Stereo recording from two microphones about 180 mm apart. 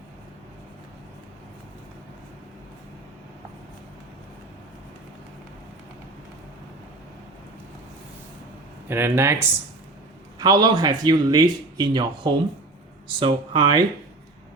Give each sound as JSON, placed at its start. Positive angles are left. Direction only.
{"t": 8.9, "sound": "a man's voice", "side_deg": -15}